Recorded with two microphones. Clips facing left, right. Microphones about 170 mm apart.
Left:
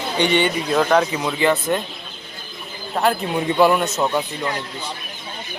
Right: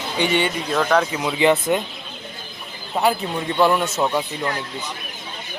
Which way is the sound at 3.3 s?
10° left (ahead or behind).